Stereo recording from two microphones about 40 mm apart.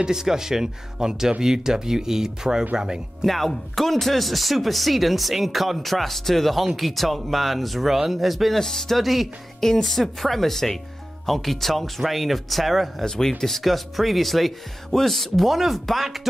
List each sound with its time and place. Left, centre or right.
0.0 s speech: centre
3.3 s speech: centre
8.5 s speech: centre
9.0 s speech: centre
9.6 s speech: centre
13.0 s speech: centre
13.4 s speech: centre